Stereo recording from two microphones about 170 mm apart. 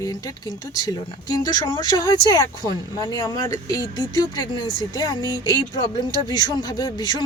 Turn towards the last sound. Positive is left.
turn(degrees=25)  # may be behind; listen again after turning